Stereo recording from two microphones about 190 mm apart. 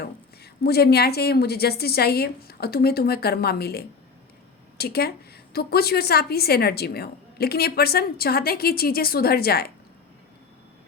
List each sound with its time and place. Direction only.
0.6 s a woman's voice: 55° left (ahead or behind)